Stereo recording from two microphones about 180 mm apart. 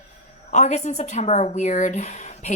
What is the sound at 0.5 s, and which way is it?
A woman's voice, 40° left (ahead or behind).